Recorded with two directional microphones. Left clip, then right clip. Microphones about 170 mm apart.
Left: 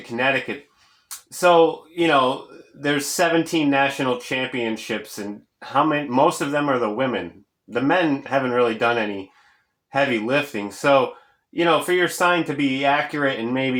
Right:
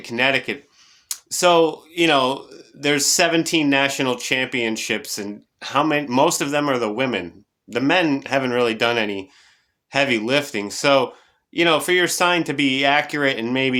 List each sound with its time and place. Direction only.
0.0 s speech: 35° right (ahead or behind)